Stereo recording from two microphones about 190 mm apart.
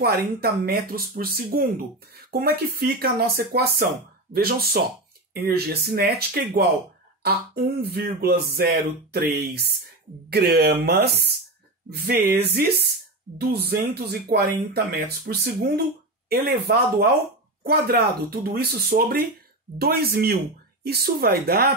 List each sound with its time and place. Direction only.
0.0 s speech: 55° right (ahead or behind)
7.8 s speech: 55° right (ahead or behind)